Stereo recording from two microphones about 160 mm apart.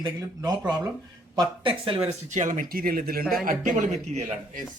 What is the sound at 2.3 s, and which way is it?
Speech, 50° right (ahead or behind).